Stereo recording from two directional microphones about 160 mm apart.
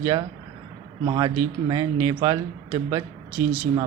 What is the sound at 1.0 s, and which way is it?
A man's voice, 30° right (ahead or behind).